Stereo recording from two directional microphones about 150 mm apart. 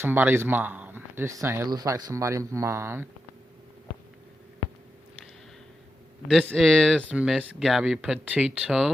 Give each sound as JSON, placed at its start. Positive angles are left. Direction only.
{"t": 0.0, "sound": "speech", "side_deg": -15}
{"t": 6.2, "sound": "speech", "side_deg": -5}